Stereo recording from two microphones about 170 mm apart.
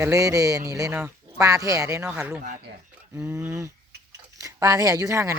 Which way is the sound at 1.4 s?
20° right (ahead or behind).